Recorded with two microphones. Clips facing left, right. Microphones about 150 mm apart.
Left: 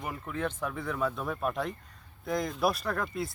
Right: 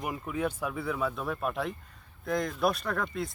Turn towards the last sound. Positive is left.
turn(degrees=0)  # may be behind; listen again after turning